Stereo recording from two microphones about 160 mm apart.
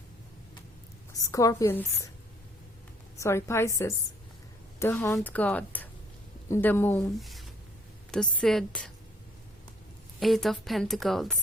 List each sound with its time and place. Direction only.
1.1 s a woman's voice: 20° left (ahead or behind)
3.2 s a woman's voice: 15° left (ahead or behind)
7.2 s a woman's voice: centre (ahead or behind)
10.2 s a woman's voice: centre (ahead or behind)